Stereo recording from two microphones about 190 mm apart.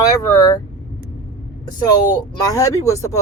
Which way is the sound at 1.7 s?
20° left (ahead or behind).